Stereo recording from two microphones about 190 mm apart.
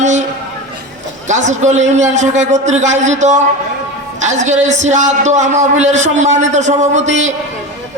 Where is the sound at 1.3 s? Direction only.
40° right (ahead or behind).